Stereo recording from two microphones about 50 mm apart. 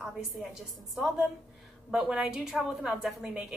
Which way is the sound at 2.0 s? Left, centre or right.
Centre.